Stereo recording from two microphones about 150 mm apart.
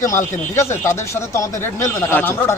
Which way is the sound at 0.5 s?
20° left (ahead or behind).